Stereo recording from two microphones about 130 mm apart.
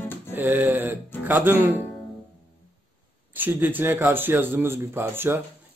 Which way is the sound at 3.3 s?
15° right (ahead or behind).